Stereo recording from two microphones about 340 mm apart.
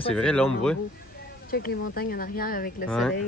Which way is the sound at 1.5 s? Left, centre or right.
Left.